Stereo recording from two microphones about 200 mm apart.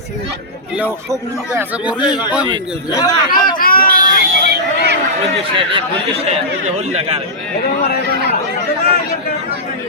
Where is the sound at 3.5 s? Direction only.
45° left (ahead or behind).